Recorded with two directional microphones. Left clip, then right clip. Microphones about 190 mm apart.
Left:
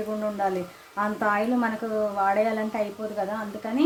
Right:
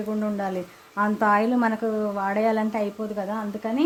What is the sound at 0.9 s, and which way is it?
Speech, 45° right (ahead or behind).